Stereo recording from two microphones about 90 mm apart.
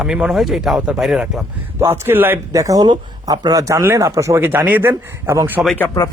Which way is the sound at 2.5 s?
40° right (ahead or behind).